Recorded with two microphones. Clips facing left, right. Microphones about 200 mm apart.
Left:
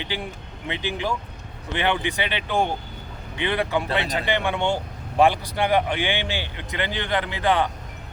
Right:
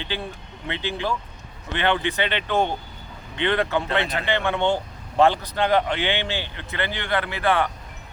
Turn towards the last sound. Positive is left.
turn(degrees=15)  # may be behind; listen again after turning